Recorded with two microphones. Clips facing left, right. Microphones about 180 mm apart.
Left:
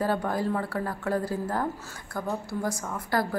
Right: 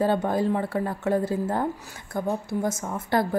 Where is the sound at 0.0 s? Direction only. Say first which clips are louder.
Right 4 dB; 25° right (ahead or behind).